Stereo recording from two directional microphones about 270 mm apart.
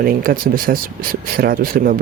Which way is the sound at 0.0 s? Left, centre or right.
Right.